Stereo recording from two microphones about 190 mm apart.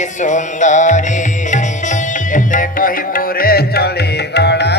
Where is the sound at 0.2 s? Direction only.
40° left (ahead or behind).